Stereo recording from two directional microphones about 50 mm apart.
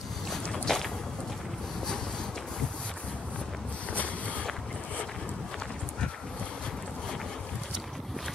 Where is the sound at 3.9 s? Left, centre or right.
Left.